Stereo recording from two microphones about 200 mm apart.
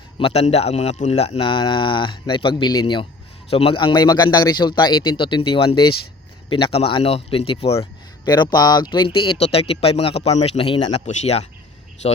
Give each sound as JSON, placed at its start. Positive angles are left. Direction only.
{"t": 0.2, "sound": "speech", "side_deg": 30}
{"t": 11.0, "sound": "speech", "side_deg": 35}